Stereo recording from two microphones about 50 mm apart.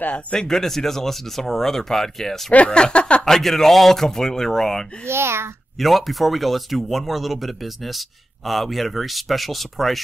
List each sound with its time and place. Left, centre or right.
0.3 s speech: centre
2.5 s speech: left
3.3 s speech: centre
5.0 s a child's voice: right
5.8 s speech: centre